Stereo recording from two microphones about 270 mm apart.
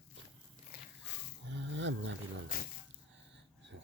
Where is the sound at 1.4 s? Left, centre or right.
Right.